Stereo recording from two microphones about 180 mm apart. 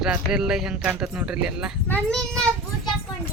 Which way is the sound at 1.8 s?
5° left (ahead or behind).